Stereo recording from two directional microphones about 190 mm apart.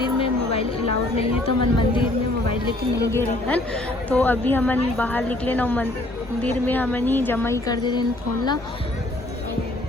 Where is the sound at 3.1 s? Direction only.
15° left (ahead or behind).